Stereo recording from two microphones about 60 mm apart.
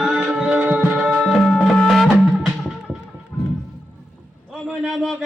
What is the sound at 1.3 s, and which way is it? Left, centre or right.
Music, centre.